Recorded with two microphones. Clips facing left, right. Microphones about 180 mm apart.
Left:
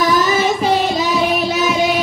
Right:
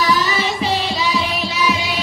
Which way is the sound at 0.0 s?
45° left (ahead or behind).